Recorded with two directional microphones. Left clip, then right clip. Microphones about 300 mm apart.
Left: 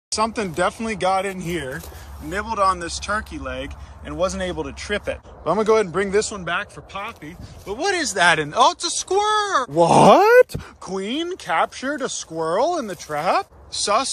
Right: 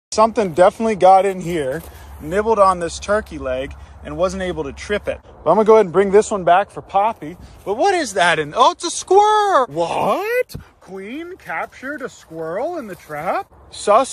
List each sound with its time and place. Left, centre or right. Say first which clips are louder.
0.1 s speech: right 7 dB; centre
9.8 s speech: left 6 dB; left
11.0 s speech: left 4 dB; centre